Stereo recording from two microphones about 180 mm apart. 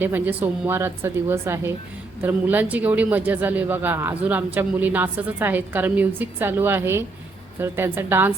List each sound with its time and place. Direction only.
0.0 s speech: 10° right (ahead or behind)